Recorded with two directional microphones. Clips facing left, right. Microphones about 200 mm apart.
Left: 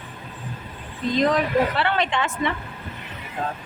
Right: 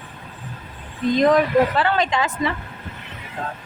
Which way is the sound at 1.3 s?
40° right (ahead or behind).